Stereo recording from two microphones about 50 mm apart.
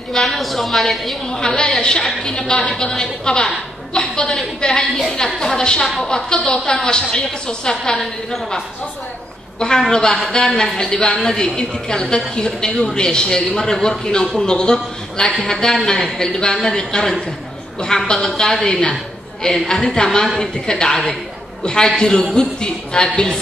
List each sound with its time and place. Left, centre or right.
0.1 s a woman's voice: centre
1.3 s a man's voice: centre
9.6 s a man's voice: centre